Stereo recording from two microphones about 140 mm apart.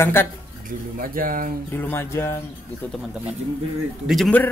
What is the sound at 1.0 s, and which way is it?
Speech, 80° right.